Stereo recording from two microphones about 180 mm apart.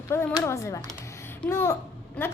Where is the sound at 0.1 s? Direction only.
15° left (ahead or behind).